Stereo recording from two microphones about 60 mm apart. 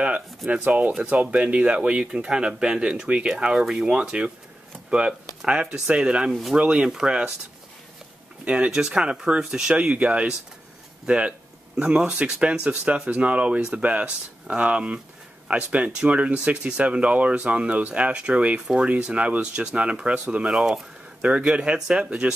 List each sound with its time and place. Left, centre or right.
0.5 s speech: right; by 5.1 s centre
5.4 s speech: centre
8.5 s speech: centre
20.4 s speech: centre
21.2 s speech: right